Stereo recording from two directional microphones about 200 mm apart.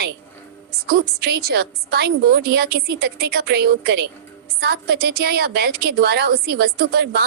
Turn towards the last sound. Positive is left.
turn(degrees=-50)  # may be behind; listen again after turning